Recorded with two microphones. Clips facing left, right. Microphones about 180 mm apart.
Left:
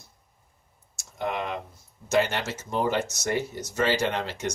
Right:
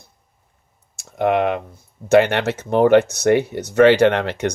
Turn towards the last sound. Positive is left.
turn(degrees=-65)  # may be behind; listen again after turning